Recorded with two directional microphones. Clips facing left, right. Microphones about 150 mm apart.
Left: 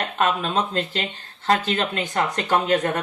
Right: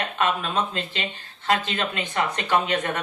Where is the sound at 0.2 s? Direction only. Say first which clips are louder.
Left 2 dB; 40° left (ahead or behind).